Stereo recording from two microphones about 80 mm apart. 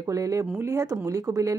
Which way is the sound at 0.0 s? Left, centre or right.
Right.